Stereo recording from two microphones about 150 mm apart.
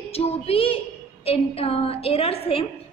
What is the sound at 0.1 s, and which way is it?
A woman's voice, 40° left (ahead or behind).